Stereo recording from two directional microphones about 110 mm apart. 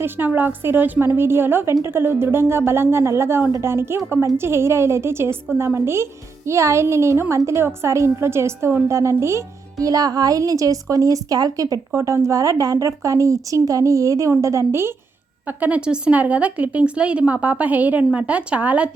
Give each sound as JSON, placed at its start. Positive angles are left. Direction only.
{"t": 0.0, "sound": "a woman's voice", "side_deg": -15}